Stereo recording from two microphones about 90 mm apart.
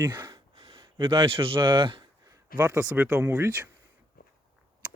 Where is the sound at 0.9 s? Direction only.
70° right (ahead or behind).